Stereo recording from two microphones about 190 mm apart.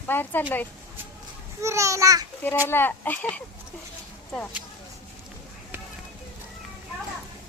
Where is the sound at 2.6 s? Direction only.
10° left (ahead or behind).